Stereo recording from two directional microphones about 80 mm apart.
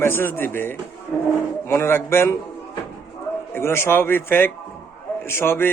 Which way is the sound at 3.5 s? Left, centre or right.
Left.